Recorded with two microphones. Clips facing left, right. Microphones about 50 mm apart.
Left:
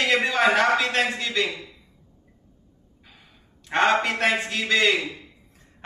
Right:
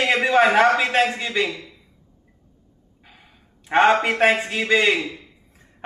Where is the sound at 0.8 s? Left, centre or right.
Right.